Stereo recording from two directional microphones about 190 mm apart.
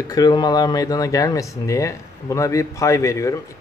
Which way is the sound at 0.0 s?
20° left (ahead or behind).